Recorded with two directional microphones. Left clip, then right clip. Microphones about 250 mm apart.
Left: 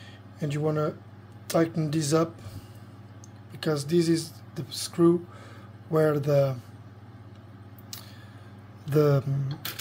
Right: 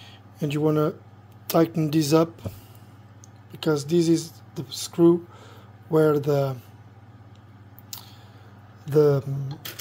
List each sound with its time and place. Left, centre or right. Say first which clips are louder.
0.0 s a sound: right 4 dB; right
1.5 s speech: right 4 dB; right
3.5 s speech: right 3 dB; centre
7.9 s squish: right 2 dB; centre
8.9 s speech: right 4 dB; centre